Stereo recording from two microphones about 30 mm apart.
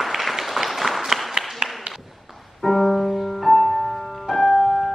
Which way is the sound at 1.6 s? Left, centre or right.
Right.